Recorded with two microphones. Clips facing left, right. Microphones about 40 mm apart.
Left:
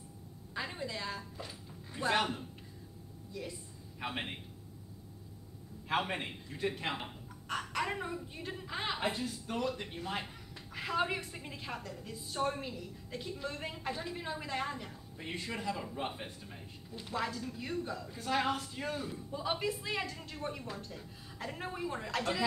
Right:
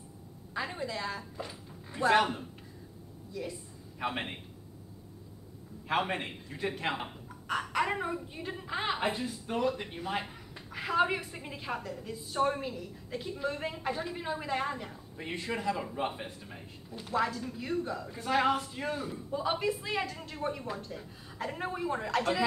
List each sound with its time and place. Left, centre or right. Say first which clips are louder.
0.6 s a sound: right 4 dB; centre
0.9 s speech: right 4 dB; centre
2.0 s speech: right 6 dB; centre
4.0 s speech: right 4 dB; centre
5.9 s speech: right 3 dB; centre